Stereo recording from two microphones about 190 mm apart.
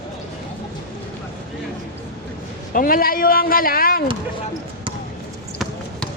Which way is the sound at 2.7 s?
50° left (ahead or behind).